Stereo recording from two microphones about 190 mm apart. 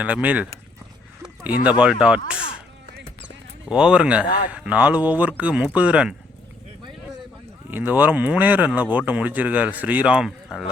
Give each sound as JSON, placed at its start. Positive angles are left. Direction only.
{"t": 0.0, "sound": "speech", "side_deg": -10}
{"t": 1.8, "sound": "speech", "side_deg": -5}
{"t": 3.7, "sound": "speech", "side_deg": -5}
{"t": 4.3, "sound": "speech", "side_deg": 45}
{"t": 4.5, "sound": "speech", "side_deg": -5}
{"t": 7.7, "sound": "speech", "side_deg": -10}